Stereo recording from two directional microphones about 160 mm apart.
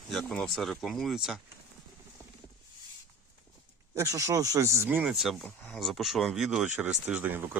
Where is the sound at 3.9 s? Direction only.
20° right (ahead or behind).